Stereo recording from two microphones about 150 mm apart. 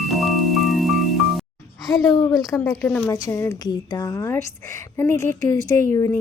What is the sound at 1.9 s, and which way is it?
A woman's voice, 25° left (ahead or behind).